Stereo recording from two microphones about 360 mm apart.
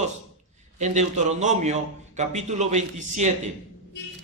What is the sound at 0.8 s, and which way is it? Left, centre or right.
Speech, centre.